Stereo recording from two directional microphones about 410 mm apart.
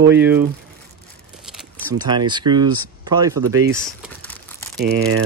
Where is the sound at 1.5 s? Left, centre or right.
Centre.